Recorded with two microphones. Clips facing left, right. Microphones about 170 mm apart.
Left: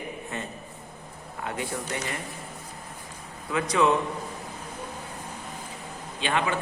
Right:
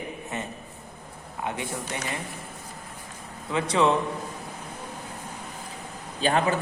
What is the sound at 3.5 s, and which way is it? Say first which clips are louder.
Speech: right 1 dB; 30° right (ahead or behind).